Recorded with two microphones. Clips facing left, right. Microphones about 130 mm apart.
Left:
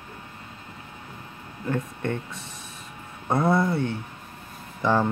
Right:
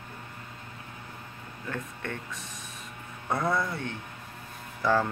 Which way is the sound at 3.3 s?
30° left (ahead or behind).